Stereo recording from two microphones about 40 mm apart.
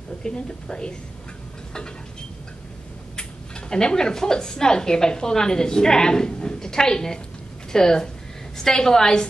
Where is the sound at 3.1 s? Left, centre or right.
Left.